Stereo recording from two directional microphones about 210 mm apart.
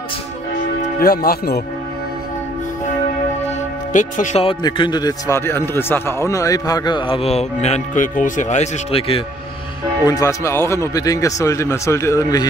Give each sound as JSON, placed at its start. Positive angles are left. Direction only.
{"t": 0.9, "sound": "speech", "side_deg": 45}
{"t": 3.4, "sound": "speech", "side_deg": 35}
{"t": 10.0, "sound": "speech", "side_deg": 15}